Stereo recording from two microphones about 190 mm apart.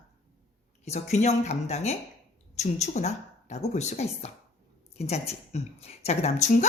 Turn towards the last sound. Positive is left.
turn(degrees=35)  # may be behind; listen again after turning